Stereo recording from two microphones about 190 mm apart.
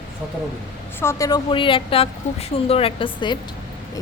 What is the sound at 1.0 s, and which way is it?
A woman's voice, 20° left (ahead or behind).